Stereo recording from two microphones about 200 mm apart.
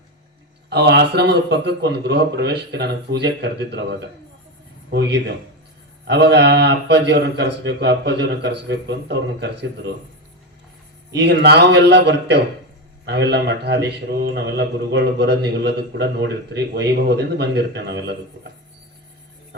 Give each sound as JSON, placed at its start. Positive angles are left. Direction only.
{"t": 0.7, "sound": "a man's voice", "side_deg": -55}
{"t": 11.1, "sound": "a man's voice", "side_deg": -60}